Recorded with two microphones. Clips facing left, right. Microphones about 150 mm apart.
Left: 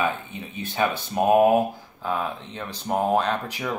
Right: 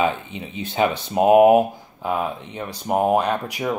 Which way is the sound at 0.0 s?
20° right (ahead or behind).